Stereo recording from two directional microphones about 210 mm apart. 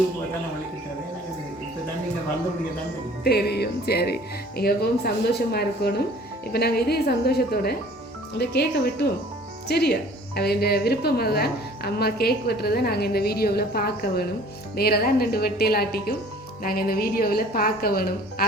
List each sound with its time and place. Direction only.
3.2 s a woman's voice: 50° left (ahead or behind)